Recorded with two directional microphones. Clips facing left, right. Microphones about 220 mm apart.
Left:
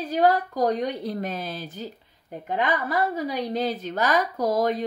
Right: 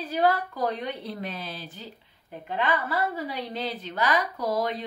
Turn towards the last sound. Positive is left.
turn(degrees=45)  # may be behind; listen again after turning